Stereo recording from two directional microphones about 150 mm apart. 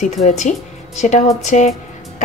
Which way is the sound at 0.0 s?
50° left (ahead or behind).